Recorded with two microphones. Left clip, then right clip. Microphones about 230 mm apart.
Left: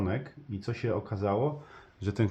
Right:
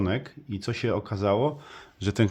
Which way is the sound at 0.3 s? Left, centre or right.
Right.